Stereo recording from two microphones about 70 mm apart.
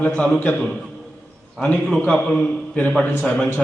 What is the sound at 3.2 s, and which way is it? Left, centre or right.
Mantra, left.